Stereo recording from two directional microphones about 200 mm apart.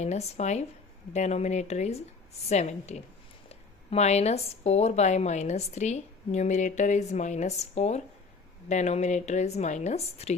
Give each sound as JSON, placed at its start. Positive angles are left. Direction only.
{"t": 0.0, "sound": "speech", "side_deg": 35}